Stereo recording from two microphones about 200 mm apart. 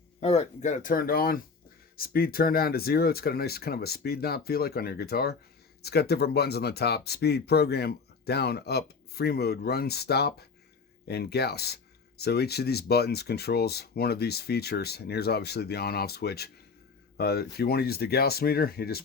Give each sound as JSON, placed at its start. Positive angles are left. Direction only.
{"t": 0.2, "sound": "speech", "side_deg": 30}